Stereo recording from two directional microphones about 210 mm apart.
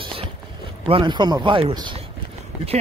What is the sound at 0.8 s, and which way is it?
Speech, 25° right (ahead or behind).